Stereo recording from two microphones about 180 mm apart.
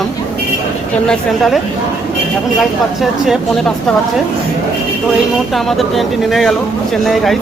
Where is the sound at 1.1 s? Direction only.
Centre (ahead or behind).